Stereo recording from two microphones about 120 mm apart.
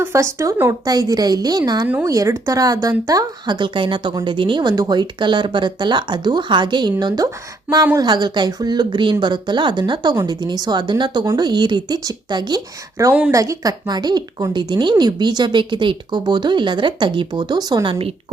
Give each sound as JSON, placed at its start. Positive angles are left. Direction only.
{"t": 0.0, "sound": "speech", "side_deg": -25}
{"t": 13.0, "sound": "speech", "side_deg": -25}